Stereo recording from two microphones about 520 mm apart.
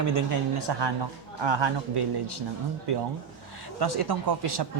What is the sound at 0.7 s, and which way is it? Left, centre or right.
Speech, right.